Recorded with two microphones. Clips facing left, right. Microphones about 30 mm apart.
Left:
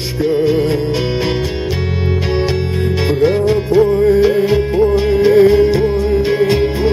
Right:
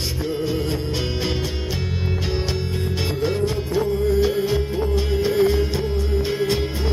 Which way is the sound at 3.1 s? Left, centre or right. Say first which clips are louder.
Left 11 dB; left.